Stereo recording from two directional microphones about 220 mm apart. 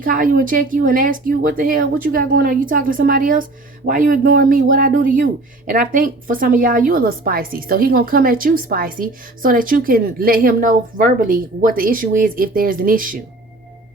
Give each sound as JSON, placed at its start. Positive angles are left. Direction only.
{"t": 0.0, "sound": "a woman's voice", "side_deg": -40}